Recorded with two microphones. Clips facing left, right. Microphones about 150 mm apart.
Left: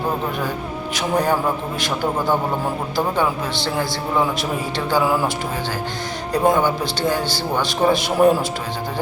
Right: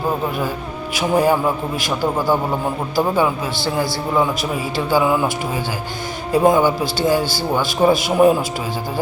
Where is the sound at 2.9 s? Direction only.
5° right (ahead or behind).